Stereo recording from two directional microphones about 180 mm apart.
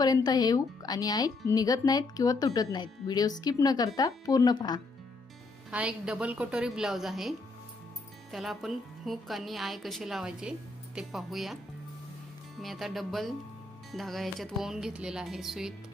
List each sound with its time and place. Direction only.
0.0 s speech: 20° left (ahead or behind)
5.7 s a woman's voice: 5° right (ahead or behind)
12.5 s a woman's voice: centre (ahead or behind)